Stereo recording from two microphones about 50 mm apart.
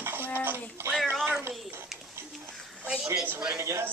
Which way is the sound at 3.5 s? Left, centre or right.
Right.